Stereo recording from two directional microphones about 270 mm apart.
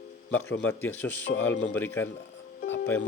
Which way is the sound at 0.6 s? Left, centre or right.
Centre.